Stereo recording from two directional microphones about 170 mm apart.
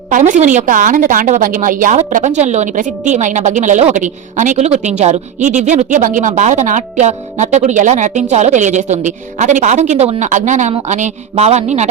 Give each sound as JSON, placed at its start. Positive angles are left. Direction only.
{"t": 0.1, "sound": "a woman's voice", "side_deg": -50}